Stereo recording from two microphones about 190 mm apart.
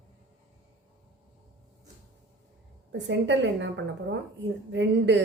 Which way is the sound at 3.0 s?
70° right (ahead or behind).